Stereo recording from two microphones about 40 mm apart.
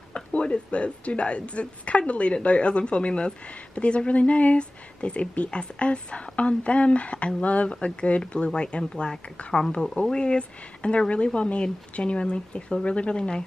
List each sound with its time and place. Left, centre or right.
0.1 s a woman's voice: left